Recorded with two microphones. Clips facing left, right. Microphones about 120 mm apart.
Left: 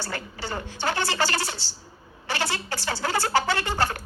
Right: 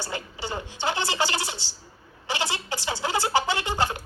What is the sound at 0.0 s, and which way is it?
Speech, 15° right (ahead or behind).